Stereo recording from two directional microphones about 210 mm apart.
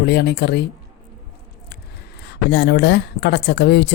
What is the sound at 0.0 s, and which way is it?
Speech, 50° left (ahead or behind).